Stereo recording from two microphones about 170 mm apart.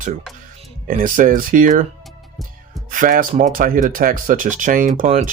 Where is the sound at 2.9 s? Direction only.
50° right (ahead or behind).